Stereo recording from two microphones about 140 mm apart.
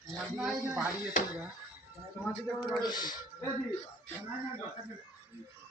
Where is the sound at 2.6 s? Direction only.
30° left (ahead or behind).